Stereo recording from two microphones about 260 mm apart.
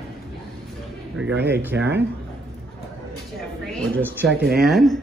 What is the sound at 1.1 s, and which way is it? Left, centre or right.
Speech, right.